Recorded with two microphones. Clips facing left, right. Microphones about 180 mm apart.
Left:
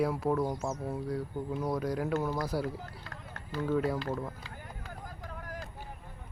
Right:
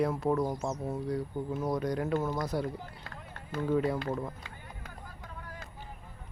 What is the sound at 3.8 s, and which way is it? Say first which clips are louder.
Speech: right 1 dB; centre (ahead or behind).